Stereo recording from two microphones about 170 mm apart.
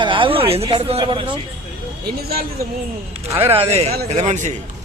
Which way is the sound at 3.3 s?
15° right (ahead or behind).